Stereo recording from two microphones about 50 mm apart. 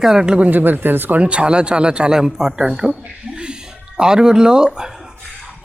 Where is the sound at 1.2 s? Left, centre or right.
Right.